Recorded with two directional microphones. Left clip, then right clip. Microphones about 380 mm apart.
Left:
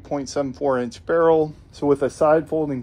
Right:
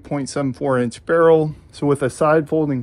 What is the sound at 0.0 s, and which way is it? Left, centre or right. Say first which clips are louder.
Speech: right 1 dB; centre.